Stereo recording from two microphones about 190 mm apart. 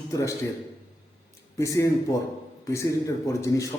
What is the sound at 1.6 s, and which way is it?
Speech, 15° left (ahead or behind).